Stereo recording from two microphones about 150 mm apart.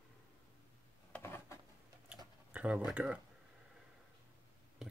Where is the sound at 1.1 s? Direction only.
15° left (ahead or behind).